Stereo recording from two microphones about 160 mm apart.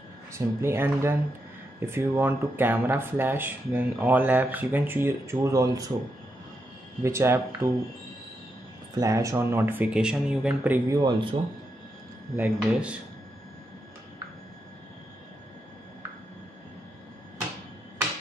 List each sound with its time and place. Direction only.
0.3 s speech: 15° right (ahead or behind)
7.0 s speech: 15° right (ahead or behind)
8.9 s speech: 20° right (ahead or behind)
10.9 s speech: 25° right (ahead or behind)
12.4 s speech: 10° right (ahead or behind)